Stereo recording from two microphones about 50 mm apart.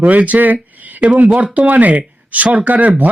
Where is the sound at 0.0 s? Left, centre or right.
Right.